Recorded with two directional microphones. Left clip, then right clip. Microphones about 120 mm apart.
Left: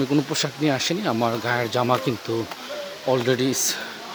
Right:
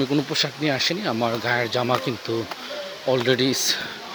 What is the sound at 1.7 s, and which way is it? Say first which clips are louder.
Speech: left 1 dB; 30° left (ahead or behind).